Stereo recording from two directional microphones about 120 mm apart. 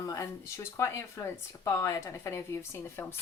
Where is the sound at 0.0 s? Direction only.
25° left (ahead or behind).